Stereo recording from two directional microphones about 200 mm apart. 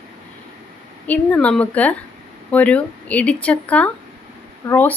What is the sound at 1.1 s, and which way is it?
A woman's voice, 5° left (ahead or behind).